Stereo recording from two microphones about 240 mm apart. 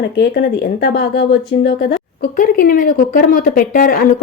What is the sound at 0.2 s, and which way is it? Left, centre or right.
A woman's voice, left.